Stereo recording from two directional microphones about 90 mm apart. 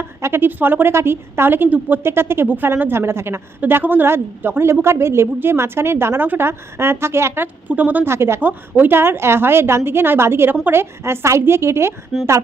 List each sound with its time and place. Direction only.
0.0 s a woman's voice: 25° right (ahead or behind)